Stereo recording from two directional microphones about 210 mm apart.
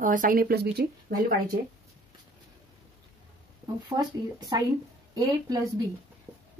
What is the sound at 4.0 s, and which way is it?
Speech, 20° right (ahead or behind).